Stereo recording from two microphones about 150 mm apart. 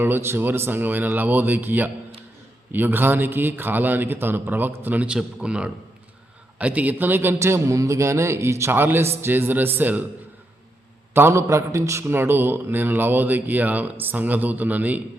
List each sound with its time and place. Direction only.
0.0 s a man's voice: 15° right (ahead or behind)
11.1 s a man's voice: 15° right (ahead or behind)